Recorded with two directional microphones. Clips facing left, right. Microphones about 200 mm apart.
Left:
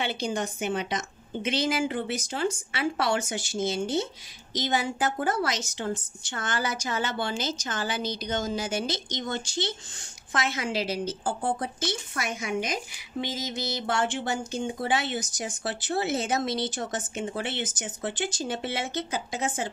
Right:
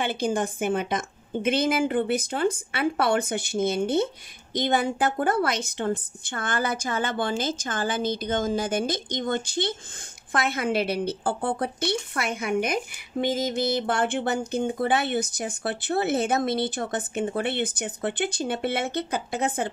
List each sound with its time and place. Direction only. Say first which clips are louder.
0.0 s a woman's voice: right 4 dB; 50° right (ahead or behind)